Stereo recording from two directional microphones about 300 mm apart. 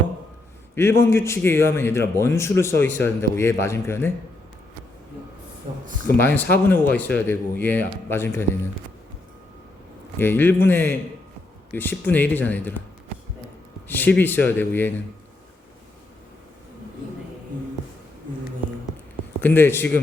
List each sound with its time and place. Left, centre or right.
0.8 s speech: centre
5.7 s speech: right
6.1 s speech: centre
10.2 s speech: centre
13.8 s speech: centre
19.4 s speech: centre